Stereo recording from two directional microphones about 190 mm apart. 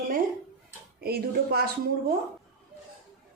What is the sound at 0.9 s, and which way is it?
Speech, 55° right (ahead or behind).